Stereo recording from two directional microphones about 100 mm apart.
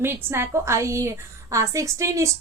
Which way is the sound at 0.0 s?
25° right (ahead or behind).